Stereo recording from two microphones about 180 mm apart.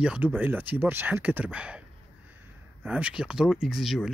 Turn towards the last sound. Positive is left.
turn(degrees=0)  # may be behind; listen again after turning